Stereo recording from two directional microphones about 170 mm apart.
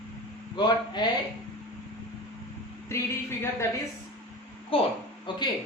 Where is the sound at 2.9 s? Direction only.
15° left (ahead or behind).